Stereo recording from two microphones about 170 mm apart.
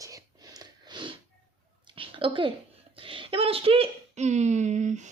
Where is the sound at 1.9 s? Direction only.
30° right (ahead or behind).